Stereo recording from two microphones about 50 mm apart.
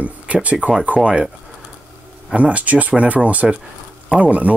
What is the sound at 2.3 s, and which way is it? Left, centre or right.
Speech, right.